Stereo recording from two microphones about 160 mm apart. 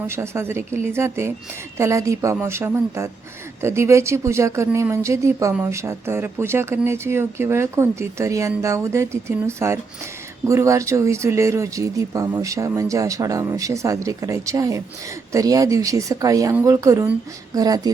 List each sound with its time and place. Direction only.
0.1 s speech: 15° right (ahead or behind)